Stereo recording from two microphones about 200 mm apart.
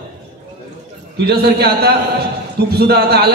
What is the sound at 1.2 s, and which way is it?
A man's voice, 55° right (ahead or behind).